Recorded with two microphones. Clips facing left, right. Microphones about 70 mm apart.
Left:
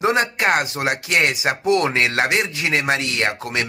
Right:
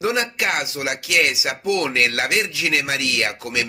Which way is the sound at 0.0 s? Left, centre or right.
Left.